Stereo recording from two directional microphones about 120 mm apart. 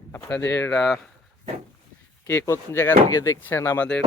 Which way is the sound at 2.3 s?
20° left (ahead or behind).